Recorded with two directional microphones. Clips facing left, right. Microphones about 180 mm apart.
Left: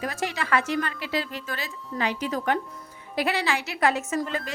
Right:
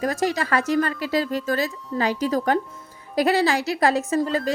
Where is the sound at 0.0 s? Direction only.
40° right (ahead or behind).